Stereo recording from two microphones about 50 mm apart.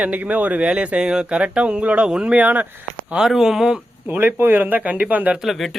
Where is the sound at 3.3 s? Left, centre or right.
Centre.